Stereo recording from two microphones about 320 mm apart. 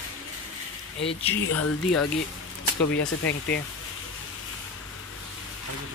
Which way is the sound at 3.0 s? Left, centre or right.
Left.